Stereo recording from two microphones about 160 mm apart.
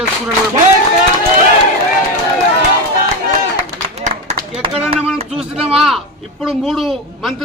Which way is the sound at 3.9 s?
45° right (ahead or behind).